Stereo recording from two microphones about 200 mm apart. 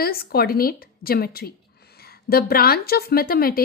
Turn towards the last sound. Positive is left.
turn(degrees=50)  # may be behind; listen again after turning